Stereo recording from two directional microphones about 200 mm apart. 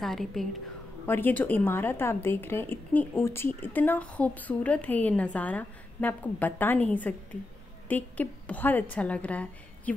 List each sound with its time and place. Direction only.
0.0 s a woman's voice: centre (ahead or behind)